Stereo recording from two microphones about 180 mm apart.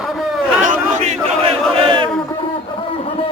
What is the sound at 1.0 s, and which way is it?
Battle cry, 35° right (ahead or behind).